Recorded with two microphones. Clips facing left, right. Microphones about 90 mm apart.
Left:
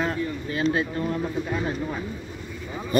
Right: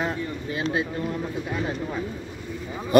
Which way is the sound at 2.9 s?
65° right (ahead or behind).